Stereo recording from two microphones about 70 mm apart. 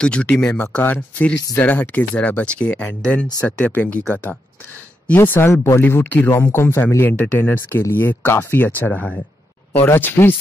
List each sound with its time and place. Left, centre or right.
0.0 s speech: centre
0.5 s speech: left